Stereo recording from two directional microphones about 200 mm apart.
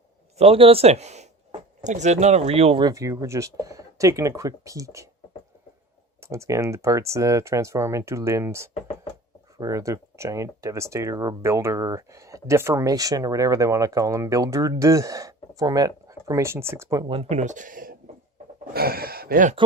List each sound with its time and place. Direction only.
0.3 s speech: 30° right (ahead or behind)
6.1 s speech: 15° right (ahead or behind)
17.2 s speech: 35° right (ahead or behind)